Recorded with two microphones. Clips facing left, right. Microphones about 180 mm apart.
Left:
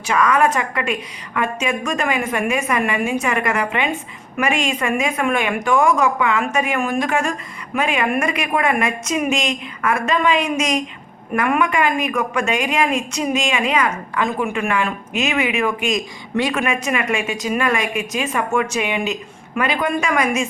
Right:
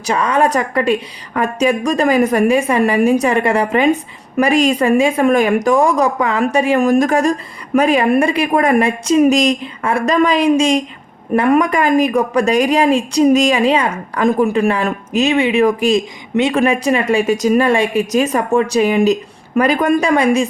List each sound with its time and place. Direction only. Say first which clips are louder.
0.0 s a woman's voice: right 2 dB; 35° right (ahead or behind)